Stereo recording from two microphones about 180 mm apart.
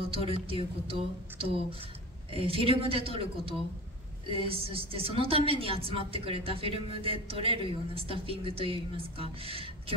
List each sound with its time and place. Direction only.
0.1 s a woman's voice: 30° right (ahead or behind)